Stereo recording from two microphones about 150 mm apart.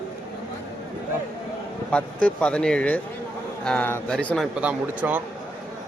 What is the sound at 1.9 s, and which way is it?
A man's voice, 5° left (ahead or behind).